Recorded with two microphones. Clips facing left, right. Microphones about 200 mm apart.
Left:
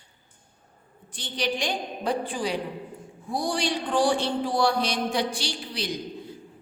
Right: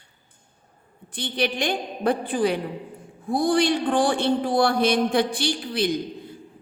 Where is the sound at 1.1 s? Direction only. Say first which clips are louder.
Right 3 dB; 60° right (ahead or behind).